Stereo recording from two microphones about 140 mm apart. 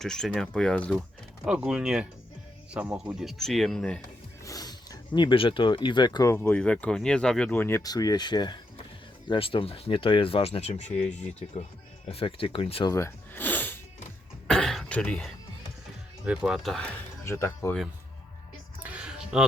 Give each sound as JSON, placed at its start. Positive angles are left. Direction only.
{"t": 0.0, "sound": "speech", "side_deg": 5}
{"t": 1.5, "sound": "speech", "side_deg": -5}
{"t": 4.4, "sound": "speech", "side_deg": 25}
{"t": 6.2, "sound": "speech", "side_deg": 15}
{"t": 7.8, "sound": "speech", "side_deg": 25}
{"t": 12.1, "sound": "speech", "side_deg": 40}
{"t": 12.9, "sound": "snort", "side_deg": 20}
{"t": 14.4, "sound": "cough", "side_deg": 5}
{"t": 16.2, "sound": "speech", "side_deg": -5}
{"t": 17.2, "sound": "speech", "side_deg": 20}
{"t": 18.8, "sound": "music", "side_deg": -10}